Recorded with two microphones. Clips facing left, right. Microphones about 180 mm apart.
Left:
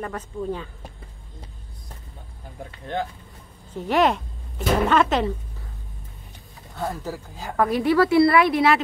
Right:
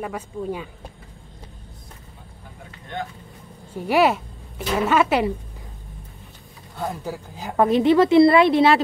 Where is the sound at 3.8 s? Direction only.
10° right (ahead or behind).